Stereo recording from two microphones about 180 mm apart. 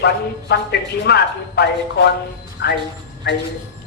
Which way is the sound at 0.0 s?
65° left (ahead or behind).